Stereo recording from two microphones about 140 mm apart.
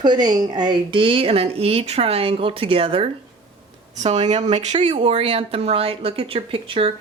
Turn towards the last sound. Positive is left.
turn(degrees=-40)  # may be behind; listen again after turning